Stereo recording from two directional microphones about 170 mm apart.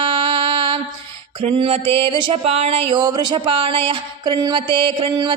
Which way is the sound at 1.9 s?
30° right (ahead or behind).